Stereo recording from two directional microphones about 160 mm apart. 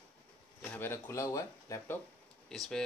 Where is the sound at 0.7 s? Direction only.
15° left (ahead or behind).